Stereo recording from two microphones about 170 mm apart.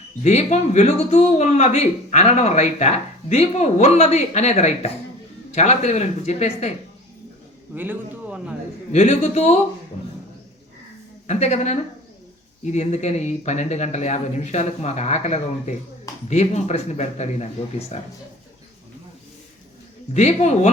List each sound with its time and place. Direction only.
0.2 s speech: 40° left (ahead or behind)
7.7 s a man's voice: 10° right (ahead or behind)
8.9 s speech: 40° left (ahead or behind)
11.3 s speech: 40° left (ahead or behind)
20.1 s speech: 40° left (ahead or behind)